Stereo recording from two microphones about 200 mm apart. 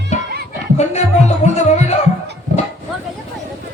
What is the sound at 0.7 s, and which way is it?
Music, 35° left (ahead or behind).